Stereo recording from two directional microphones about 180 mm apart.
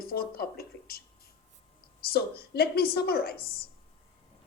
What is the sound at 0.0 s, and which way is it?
A woman's voice, 55° left (ahead or behind).